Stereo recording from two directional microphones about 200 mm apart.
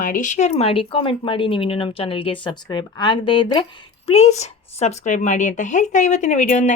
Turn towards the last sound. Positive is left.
turn(degrees=40)  # may be behind; listen again after turning